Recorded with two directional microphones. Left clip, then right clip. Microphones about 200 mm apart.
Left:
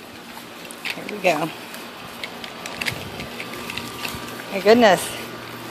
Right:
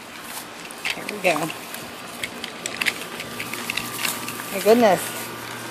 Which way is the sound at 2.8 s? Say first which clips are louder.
Right 3 dB; centre (ahead or behind).